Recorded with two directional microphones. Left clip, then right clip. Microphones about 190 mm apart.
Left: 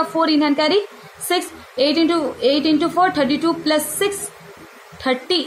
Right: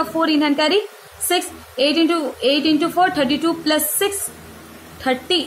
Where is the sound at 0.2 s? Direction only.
15° left (ahead or behind).